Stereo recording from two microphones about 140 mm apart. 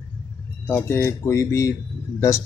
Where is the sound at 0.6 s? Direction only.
15° left (ahead or behind).